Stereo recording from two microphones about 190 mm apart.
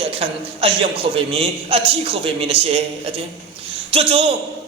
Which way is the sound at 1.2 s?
30° right (ahead or behind).